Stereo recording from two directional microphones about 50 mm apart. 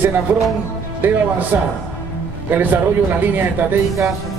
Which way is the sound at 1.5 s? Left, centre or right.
Right.